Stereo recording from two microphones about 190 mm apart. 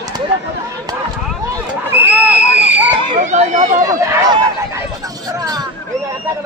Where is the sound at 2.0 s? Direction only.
10° right (ahead or behind).